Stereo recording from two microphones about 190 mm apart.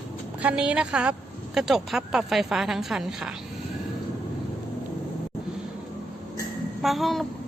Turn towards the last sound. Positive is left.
turn(degrees=0)  # may be behind; listen again after turning